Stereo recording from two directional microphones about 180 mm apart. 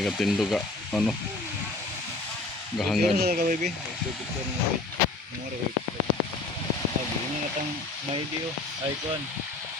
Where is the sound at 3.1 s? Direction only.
60° right (ahead or behind).